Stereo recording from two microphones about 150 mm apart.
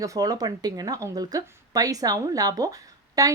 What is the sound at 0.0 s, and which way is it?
Speech, 25° right (ahead or behind).